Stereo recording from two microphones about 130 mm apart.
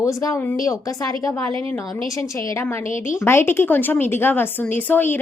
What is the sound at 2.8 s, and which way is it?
Speech, 80° left.